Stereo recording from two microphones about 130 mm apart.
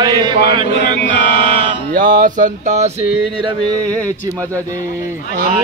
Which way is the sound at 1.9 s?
90° right.